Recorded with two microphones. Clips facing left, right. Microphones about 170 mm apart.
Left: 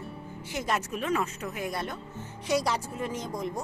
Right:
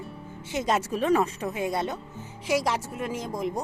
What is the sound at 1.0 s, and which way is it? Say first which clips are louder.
Speech: right 6 dB; 35° right (ahead or behind).